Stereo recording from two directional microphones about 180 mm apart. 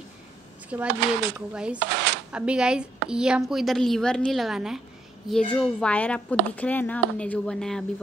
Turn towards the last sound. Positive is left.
turn(degrees=5)  # may be behind; listen again after turning